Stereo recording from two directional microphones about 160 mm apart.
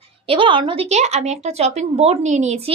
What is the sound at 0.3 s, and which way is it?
A woman's voice, 30° right (ahead or behind).